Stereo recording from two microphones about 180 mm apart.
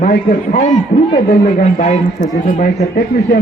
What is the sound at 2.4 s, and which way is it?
Speech, 50° left (ahead or behind).